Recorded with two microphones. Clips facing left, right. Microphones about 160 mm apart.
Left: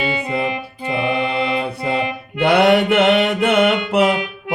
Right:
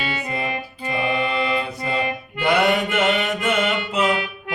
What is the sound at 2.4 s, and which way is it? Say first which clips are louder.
Music: left 6 dB; 65° left (ahead or behind).